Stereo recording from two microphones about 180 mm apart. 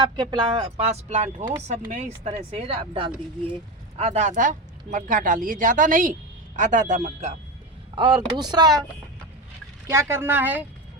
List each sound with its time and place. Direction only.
0.2 s speech: 25° right (ahead or behind); by 7.3 s 40° right (ahead or behind)
7.9 s speech: 25° right (ahead or behind)
9.9 s speech: 15° right (ahead or behind)